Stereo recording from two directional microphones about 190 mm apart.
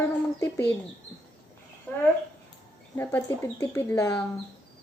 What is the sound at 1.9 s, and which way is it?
Speech, 5° left (ahead or behind).